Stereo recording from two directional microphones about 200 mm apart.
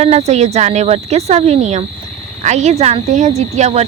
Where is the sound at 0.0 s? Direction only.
30° right (ahead or behind).